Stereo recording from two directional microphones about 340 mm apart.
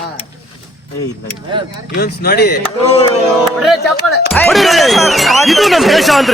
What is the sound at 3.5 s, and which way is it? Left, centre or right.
A man's voice, centre.